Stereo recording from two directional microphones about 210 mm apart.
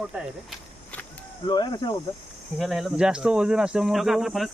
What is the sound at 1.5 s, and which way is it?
Speech, 20° left (ahead or behind).